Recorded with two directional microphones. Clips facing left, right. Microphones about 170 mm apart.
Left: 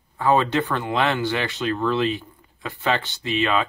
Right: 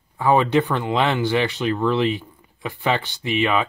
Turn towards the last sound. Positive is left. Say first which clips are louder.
# right 1 dB
turn(degrees=-15)  # may be behind; listen again after turning